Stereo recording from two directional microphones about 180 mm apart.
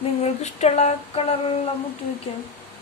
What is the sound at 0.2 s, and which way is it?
Female singing, 40° left (ahead or behind).